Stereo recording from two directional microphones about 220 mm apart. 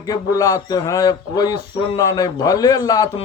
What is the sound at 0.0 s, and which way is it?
A man's voice, 15° left (ahead or behind).